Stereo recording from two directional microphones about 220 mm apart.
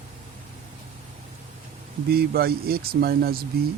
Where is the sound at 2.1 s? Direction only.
45° right (ahead or behind).